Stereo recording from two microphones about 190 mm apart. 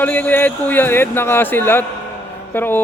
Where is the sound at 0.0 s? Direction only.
10° left (ahead or behind).